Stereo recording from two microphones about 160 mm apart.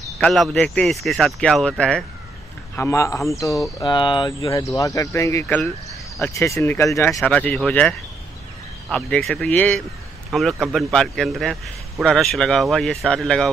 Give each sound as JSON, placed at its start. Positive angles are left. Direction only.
{"t": 0.2, "sound": "a man's voice", "side_deg": 0}
{"t": 2.7, "sound": "speech", "side_deg": 15}
{"t": 7.2, "sound": "speech", "side_deg": 5}
{"t": 8.9, "sound": "a man's voice", "side_deg": 5}